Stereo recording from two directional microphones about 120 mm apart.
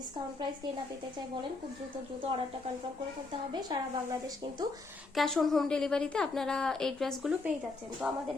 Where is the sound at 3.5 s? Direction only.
35° right (ahead or behind).